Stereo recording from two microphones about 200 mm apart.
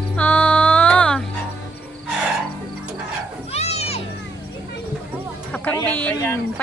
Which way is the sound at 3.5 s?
30° left (ahead or behind).